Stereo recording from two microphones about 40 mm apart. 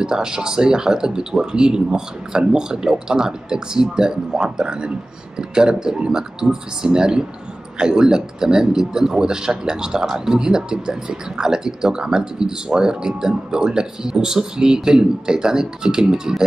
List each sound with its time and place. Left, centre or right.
0.0 s speech: centre